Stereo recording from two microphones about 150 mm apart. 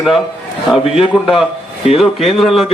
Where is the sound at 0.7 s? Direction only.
5° right (ahead or behind).